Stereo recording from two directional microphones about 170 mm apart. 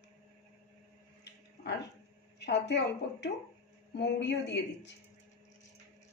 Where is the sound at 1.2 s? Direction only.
85° left.